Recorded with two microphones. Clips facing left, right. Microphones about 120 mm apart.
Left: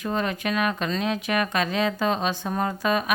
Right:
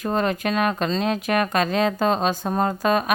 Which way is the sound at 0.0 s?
45° right (ahead or behind).